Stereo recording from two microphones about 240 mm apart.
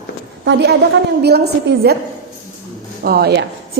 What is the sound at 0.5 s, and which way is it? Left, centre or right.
Speech, right.